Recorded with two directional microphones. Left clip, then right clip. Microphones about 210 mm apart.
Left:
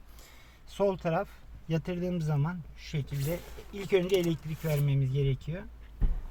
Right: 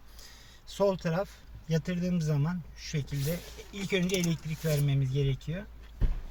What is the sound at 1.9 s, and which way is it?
Speech, 45° left (ahead or behind).